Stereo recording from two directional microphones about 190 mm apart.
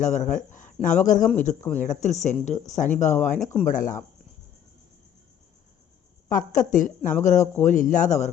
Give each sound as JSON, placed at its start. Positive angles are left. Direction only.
{"t": 0.0, "sound": "a woman's voice", "side_deg": 40}
{"t": 6.2, "sound": "a woman's voice", "side_deg": 45}